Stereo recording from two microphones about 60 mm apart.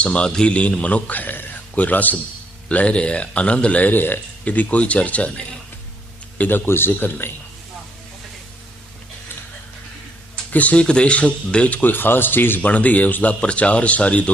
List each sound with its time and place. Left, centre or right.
0.0 s speech: centre
6.7 s speech: left
10.5 s speech: left